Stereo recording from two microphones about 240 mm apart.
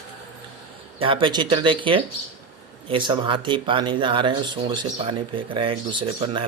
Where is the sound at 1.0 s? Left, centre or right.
Right.